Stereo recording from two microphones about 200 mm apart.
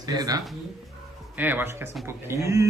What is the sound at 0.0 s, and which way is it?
Speech, 20° right (ahead or behind).